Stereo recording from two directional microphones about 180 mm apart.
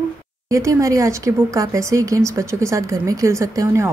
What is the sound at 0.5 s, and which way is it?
Speech, 15° right (ahead or behind).